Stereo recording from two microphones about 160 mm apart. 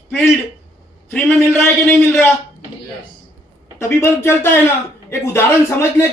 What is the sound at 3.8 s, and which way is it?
A man's voice, 15° left (ahead or behind).